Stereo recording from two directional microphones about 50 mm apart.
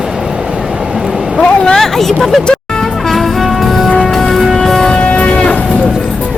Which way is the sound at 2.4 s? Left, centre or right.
Centre.